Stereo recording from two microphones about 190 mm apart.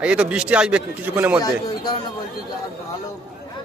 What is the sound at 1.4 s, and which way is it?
Speech, 20° left (ahead or behind).